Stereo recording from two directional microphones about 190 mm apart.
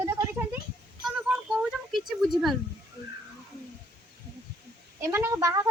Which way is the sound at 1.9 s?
Centre (ahead or behind).